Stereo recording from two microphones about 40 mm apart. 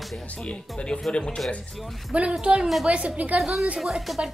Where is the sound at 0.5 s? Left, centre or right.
Left.